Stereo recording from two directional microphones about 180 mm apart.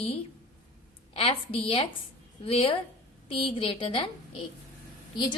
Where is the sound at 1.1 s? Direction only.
30° left (ahead or behind).